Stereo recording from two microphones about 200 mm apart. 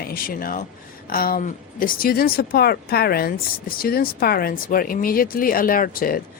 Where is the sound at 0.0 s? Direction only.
45° left (ahead or behind).